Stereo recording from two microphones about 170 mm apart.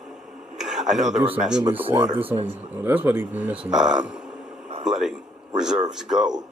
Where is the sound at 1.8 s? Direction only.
30° right (ahead or behind).